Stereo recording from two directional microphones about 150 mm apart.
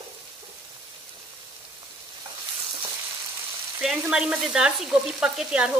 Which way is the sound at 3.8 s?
5° right (ahead or behind).